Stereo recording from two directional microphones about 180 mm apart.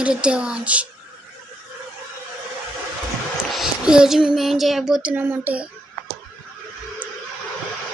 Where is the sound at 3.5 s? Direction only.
Centre (ahead or behind).